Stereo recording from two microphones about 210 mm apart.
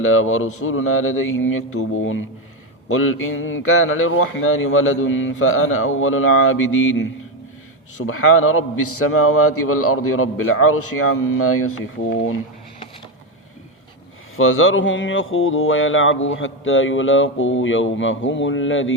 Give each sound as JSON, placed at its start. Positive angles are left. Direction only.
{"t": 0.0, "sound": "mantra", "side_deg": 80}
{"t": 8.0, "sound": "a man's voice", "side_deg": 80}
{"t": 14.3, "sound": "mantra", "side_deg": 75}